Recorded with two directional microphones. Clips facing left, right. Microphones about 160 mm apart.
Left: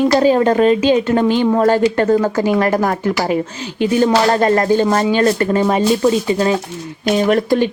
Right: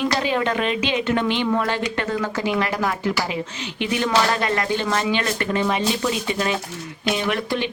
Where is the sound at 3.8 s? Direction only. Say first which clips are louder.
Left 7 dB; 35° left (ahead or behind).